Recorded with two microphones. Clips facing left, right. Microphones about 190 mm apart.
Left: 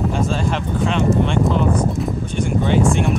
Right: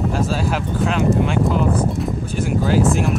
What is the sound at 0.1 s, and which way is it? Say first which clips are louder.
Speech: even; 5° right (ahead or behind).